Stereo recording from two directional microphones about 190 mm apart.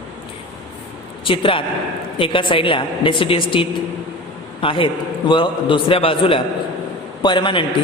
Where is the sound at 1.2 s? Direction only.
25° left (ahead or behind).